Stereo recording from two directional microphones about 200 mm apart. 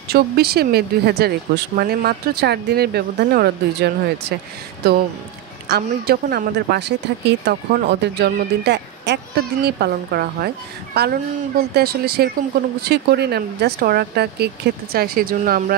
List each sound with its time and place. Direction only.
0.1 s speech: 50° right (ahead or behind)
5.7 s speech: 50° right (ahead or behind)